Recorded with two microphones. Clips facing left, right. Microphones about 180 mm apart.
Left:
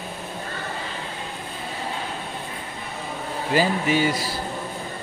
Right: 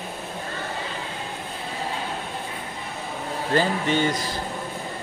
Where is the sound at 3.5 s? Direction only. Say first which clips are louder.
Left 1 dB; 10° left (ahead or behind).